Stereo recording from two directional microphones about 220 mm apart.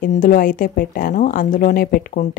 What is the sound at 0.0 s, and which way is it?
Speech, 40° left (ahead or behind).